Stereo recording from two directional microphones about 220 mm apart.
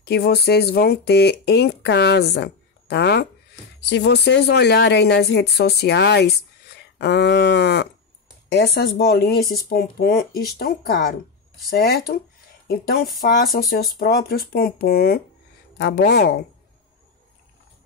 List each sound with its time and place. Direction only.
0.0 s speech: 45° left (ahead or behind)